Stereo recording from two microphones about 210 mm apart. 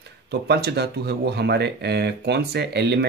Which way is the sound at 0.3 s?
50° right (ahead or behind).